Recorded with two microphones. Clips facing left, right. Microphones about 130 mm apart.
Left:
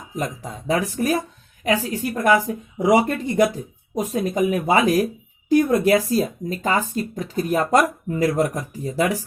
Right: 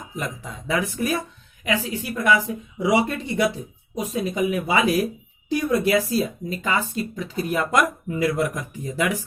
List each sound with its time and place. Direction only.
0.2 s speech: 40° left (ahead or behind)